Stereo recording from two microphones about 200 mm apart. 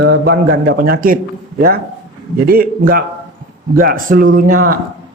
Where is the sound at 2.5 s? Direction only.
45° right (ahead or behind).